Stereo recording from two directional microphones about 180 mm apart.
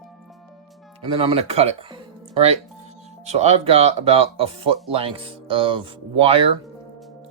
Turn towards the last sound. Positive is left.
turn(degrees=-30)  # may be behind; listen again after turning